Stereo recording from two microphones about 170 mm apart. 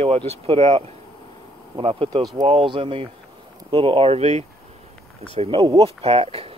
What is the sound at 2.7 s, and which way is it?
Speech, 30° right (ahead or behind).